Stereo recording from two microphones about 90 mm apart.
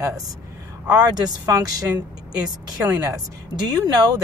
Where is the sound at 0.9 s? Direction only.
50° right (ahead or behind).